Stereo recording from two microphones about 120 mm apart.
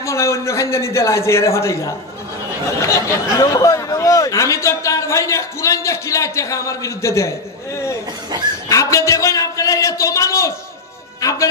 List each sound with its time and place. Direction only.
0.0 s speech: 25° left (ahead or behind)
2.9 s speech: 25° left (ahead or behind)
8.6 s a sound: 25° left (ahead or behind)
11.1 s music: 30° left (ahead or behind)